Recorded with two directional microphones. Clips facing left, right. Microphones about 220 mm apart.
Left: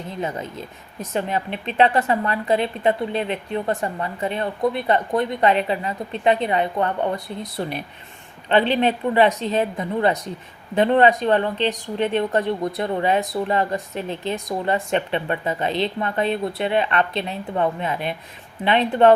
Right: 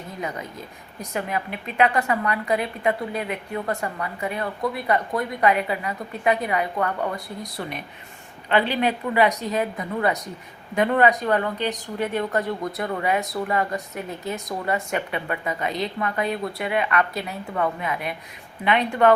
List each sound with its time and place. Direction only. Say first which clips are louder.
0.2 s a woman's voice: left 4 dB; 25° left (ahead or behind)